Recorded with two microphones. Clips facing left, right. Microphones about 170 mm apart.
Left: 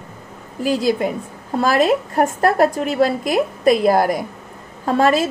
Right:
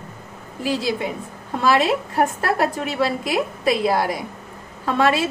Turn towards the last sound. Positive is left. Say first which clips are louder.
# left 3 dB
turn(degrees=40)  # may be behind; listen again after turning